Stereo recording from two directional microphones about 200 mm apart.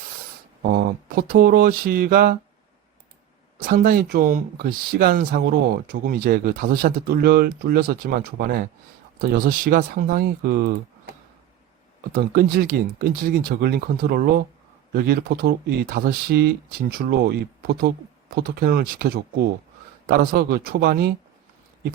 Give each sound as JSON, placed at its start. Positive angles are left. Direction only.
{"t": 0.7, "sound": "speech", "side_deg": -45}
{"t": 3.6, "sound": "speech", "side_deg": -45}
{"t": 12.1, "sound": "speech", "side_deg": -45}